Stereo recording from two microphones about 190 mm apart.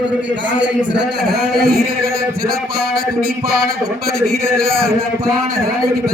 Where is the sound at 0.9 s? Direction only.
60° right (ahead or behind).